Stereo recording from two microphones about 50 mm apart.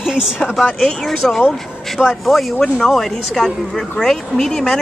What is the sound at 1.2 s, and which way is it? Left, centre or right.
A man's voice, centre.